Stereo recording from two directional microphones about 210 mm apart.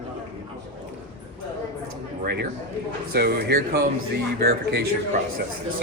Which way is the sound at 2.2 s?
50° right (ahead or behind).